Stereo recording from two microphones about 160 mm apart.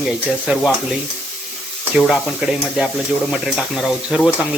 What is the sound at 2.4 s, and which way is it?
Speech, 5° right (ahead or behind).